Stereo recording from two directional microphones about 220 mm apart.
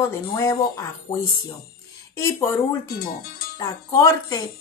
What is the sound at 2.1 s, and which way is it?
Speech, 10° left (ahead or behind).